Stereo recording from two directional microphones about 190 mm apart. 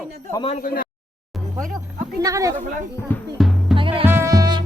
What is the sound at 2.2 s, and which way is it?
Speech, 15° right (ahead or behind).